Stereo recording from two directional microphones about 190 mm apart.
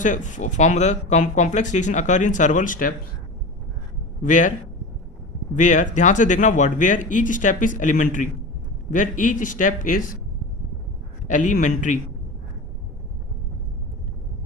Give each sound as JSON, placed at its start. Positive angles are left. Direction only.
{"t": 0.0, "sound": "speech", "side_deg": 40}
{"t": 4.2, "sound": "speech", "side_deg": 40}
{"t": 5.5, "sound": "a man's voice", "side_deg": 40}
{"t": 11.3, "sound": "speech", "side_deg": 40}